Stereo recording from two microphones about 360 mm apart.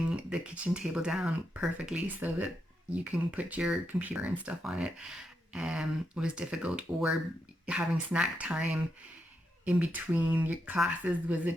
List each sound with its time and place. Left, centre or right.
0.1 s speech: centre